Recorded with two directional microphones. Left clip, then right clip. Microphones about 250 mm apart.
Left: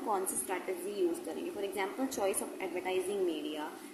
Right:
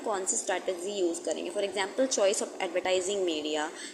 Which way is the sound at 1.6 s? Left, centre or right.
Centre.